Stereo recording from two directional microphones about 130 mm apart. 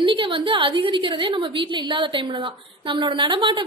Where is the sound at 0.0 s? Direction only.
40° right (ahead or behind).